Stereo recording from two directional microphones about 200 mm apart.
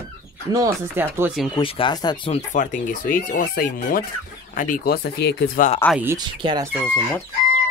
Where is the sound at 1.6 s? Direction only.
25° left (ahead or behind).